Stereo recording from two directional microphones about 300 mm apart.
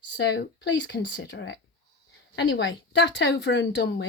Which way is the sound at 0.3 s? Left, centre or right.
Left.